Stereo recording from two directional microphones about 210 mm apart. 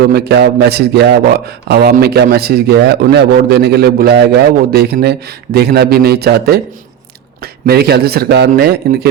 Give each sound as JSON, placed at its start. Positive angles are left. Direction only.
{"t": 0.0, "sound": "a man's voice", "side_deg": -50}